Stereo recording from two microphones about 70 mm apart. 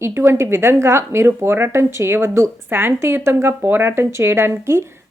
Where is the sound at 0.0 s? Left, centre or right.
Right.